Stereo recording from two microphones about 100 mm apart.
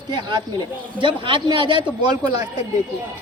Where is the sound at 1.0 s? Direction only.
55° right (ahead or behind).